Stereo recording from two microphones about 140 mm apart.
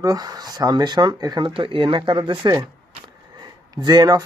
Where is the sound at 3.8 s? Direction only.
30° right (ahead or behind).